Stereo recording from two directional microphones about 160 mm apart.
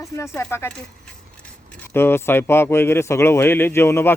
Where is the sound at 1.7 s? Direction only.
15° left (ahead or behind).